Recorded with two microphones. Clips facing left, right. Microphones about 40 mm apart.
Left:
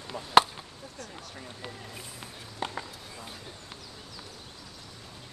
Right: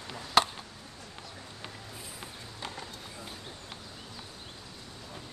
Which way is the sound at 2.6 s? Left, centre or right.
Left.